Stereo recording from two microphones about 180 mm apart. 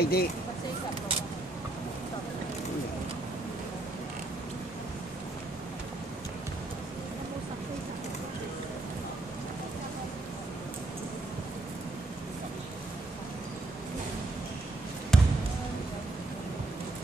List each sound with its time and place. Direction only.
0.0 s speech: 60° left (ahead or behind)
15.1 s basketball bounce: 5° left (ahead or behind)